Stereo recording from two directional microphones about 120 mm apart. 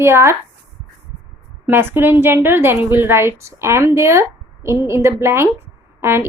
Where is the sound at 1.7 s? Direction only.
20° right (ahead or behind).